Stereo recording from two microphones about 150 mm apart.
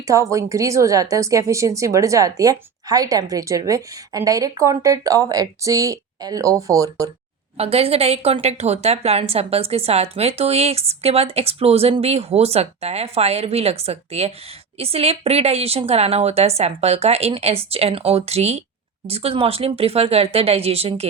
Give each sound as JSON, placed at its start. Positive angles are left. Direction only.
{"t": 0.1, "sound": "a woman's voice", "side_deg": -20}
{"t": 7.5, "sound": "a woman's voice", "side_deg": -40}